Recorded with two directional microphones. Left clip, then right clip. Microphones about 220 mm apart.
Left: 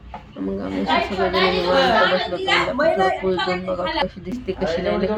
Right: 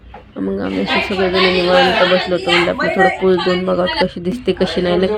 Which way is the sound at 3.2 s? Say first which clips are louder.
Right 7 dB; 30° right (ahead or behind).